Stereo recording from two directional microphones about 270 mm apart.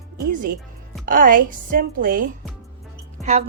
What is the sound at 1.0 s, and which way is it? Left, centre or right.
A woman's voice, right.